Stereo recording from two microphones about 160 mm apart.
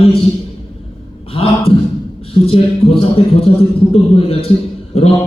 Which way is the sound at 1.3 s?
35° left (ahead or behind).